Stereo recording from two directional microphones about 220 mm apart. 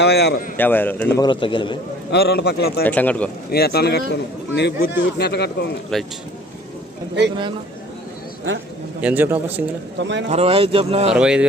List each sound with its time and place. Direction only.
0.0 s speech: 50° left (ahead or behind)
0.5 s a man's voice: 10° left (ahead or behind)
2.0 s speech: 45° left (ahead or behind)
2.8 s a man's voice: 5° left (ahead or behind)
3.5 s speech: 45° left (ahead or behind)
5.9 s speech: centre (ahead or behind)
9.0 s speech: 5° right (ahead or behind)
10.0 s speech: 55° right (ahead or behind)
10.2 s a man's voice: 30° right (ahead or behind)
11.1 s speech: 5° right (ahead or behind)